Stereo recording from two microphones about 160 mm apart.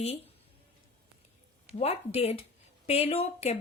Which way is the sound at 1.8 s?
40° left (ahead or behind).